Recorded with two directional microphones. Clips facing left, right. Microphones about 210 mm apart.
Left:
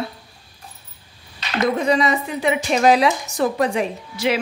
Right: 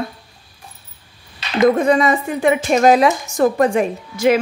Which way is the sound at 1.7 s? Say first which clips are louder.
Right 4 dB; 50° right (ahead or behind).